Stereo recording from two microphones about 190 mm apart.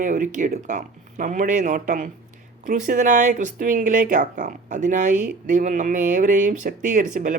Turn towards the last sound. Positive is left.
turn(degrees=-45)  # may be behind; listen again after turning